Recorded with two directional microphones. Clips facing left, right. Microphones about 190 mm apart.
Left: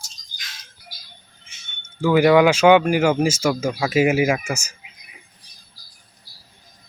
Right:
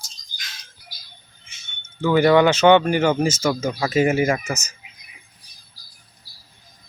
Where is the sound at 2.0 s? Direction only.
5° left (ahead or behind).